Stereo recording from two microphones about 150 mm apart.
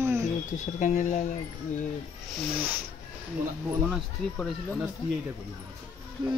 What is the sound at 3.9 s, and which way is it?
Speech, centre (ahead or behind).